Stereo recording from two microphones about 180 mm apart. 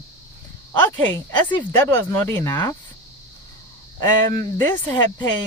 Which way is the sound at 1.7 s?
10° left (ahead or behind).